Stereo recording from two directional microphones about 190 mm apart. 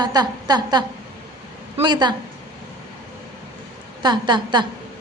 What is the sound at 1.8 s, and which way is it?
Speech, 25° right (ahead or behind).